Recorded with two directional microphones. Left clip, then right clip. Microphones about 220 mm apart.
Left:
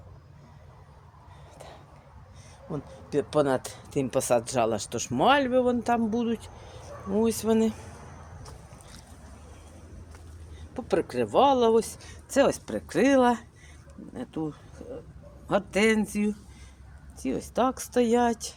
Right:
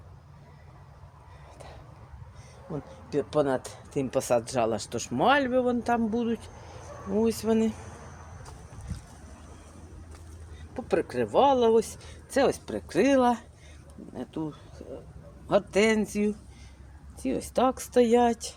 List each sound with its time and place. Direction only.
1.5 s a sound: 10° left (ahead or behind)
2.7 s speech: 20° left (ahead or behind)
10.8 s speech: 10° left (ahead or behind)